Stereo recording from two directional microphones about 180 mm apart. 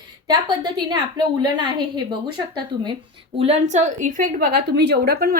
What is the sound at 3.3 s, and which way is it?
A woman's voice, 35° right (ahead or behind).